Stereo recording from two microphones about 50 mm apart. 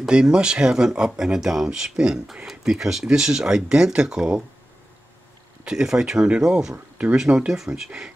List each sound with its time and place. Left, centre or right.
0.0 s speech: centre
5.7 s speech: centre
7.2 s speech: centre